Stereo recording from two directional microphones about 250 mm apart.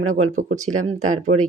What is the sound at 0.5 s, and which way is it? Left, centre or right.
Speech, right.